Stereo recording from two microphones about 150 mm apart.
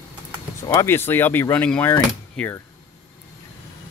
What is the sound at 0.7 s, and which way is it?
Speech, 15° left (ahead or behind).